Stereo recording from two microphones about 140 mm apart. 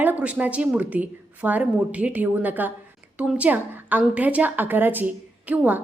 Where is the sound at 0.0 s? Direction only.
10° right (ahead or behind).